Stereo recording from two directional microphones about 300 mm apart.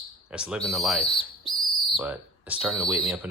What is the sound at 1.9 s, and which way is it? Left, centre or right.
Speech, centre.